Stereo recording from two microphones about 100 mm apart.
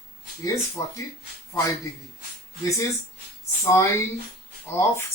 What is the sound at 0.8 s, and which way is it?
Speech, 30° left (ahead or behind).